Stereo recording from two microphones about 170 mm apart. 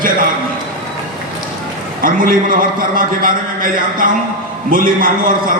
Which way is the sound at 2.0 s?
55° right (ahead or behind).